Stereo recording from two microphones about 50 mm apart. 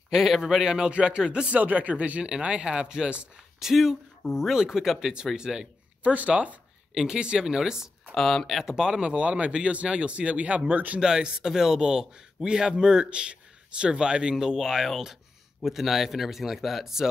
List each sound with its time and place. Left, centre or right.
0.1 s speech: centre
1.5 s speech: right
3.5 s speech: centre
6.0 s speech: right
6.9 s speech: centre
8.2 s speech: centre
9.1 s speech: right
10.7 s speech: right
11.0 s speech: centre